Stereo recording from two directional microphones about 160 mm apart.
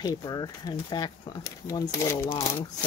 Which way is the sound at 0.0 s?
25° left (ahead or behind).